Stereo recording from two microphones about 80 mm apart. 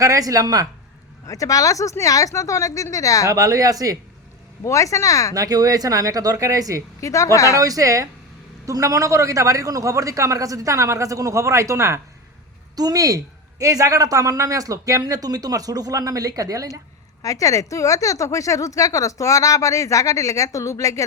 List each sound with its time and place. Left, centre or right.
0.0 s speech: right
1.3 s a woman's voice: left
3.2 s speech: right
4.6 s a woman's voice: left
5.3 s speech: right
7.0 s a woman's voice: left
7.5 s a man's voice: right
12.7 s speech: right
17.2 s a woman's voice: left